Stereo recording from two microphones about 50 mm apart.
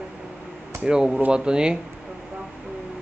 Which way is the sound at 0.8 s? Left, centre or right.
Centre.